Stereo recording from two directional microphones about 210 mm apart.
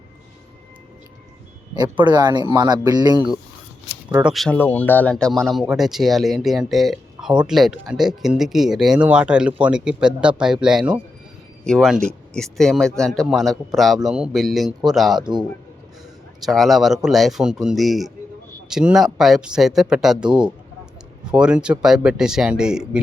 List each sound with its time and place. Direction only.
1.7 s speech: 20° right (ahead or behind)
4.1 s speech: 5° right (ahead or behind)
16.4 s speech: centre (ahead or behind)